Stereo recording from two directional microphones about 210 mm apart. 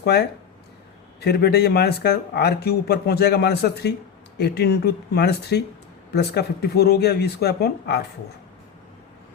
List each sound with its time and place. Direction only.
0.0 s speech: 50° left (ahead or behind)